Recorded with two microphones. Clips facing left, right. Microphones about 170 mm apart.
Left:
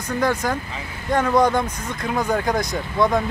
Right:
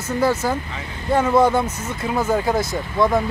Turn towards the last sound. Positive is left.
turn(degrees=0)  # may be behind; listen again after turning